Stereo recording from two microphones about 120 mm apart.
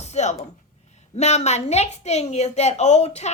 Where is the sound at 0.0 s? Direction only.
70° left (ahead or behind).